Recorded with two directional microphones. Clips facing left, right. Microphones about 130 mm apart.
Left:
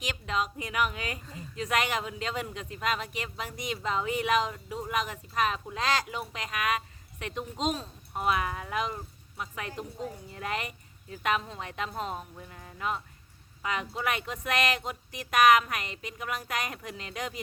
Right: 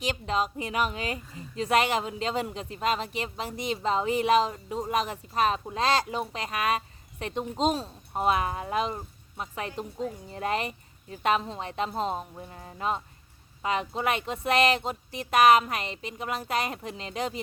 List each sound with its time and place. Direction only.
0.0 s a woman's voice: 35° right (ahead or behind)